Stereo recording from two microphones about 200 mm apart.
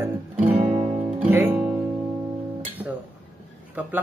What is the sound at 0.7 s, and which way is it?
Guitar, 35° right (ahead or behind).